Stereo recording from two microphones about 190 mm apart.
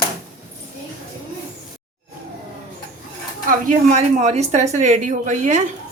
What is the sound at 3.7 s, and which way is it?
A woman's voice, 40° right (ahead or behind).